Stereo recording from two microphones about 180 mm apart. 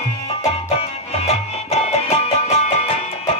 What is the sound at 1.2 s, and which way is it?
Music, 35° left (ahead or behind).